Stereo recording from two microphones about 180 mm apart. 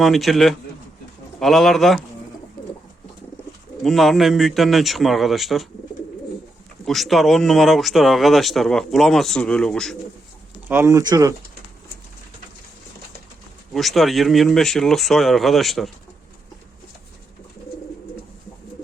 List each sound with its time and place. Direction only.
0.0 s speech: centre (ahead or behind)
3.8 s speech: centre (ahead or behind)
6.8 s speech: centre (ahead or behind)
10.7 s speech: 15° right (ahead or behind)
13.7 s speech: centre (ahead or behind)